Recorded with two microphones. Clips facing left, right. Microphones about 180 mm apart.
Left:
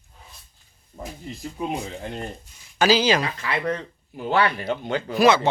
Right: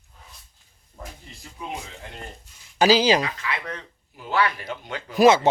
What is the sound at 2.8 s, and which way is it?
Speech, 35° right (ahead or behind).